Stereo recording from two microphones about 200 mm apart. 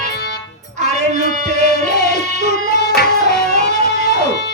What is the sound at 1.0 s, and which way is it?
Music, 35° right (ahead or behind).